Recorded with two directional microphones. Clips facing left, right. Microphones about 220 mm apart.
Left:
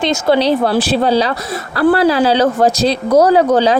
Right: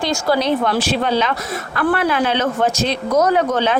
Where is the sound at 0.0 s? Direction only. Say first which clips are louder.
Left 5 dB; 25° left (ahead or behind).